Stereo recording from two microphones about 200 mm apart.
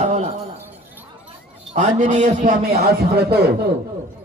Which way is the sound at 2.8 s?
50° right (ahead or behind).